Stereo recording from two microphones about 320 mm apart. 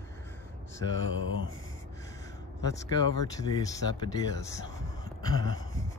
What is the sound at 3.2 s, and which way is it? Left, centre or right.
Speech, centre.